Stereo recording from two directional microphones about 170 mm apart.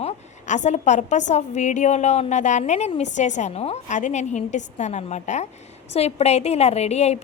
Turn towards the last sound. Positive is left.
turn(degrees=40)  # may be behind; listen again after turning